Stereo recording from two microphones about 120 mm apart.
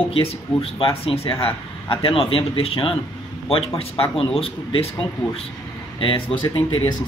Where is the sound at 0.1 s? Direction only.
50° left (ahead or behind).